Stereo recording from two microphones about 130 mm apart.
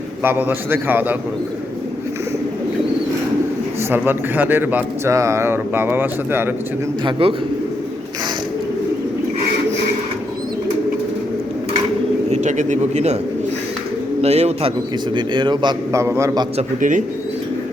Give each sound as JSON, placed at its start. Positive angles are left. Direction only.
{"t": 0.2, "sound": "a man's voice", "side_deg": -15}
{"t": 3.8, "sound": "a man's voice", "side_deg": -15}
{"t": 7.0, "sound": "speech", "side_deg": -45}
{"t": 12.3, "sound": "a sound", "side_deg": -65}
{"t": 14.2, "sound": "speech", "side_deg": -55}
{"t": 15.1, "sound": "speech", "side_deg": -35}
{"t": 15.9, "sound": "a man's voice", "side_deg": -20}
{"t": 16.6, "sound": "speech", "side_deg": -80}